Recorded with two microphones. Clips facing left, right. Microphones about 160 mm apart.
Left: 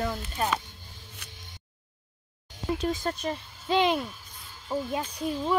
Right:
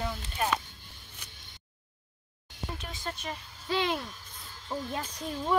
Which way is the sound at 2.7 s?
40° left (ahead or behind).